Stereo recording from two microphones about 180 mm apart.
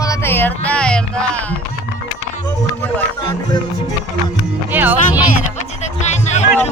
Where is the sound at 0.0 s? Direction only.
15° left (ahead or behind).